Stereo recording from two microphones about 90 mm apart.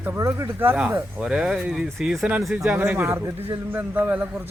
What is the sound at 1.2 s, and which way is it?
Speech, 10° right (ahead or behind).